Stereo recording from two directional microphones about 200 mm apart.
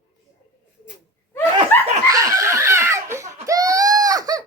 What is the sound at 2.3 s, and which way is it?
Laughter, 15° right (ahead or behind).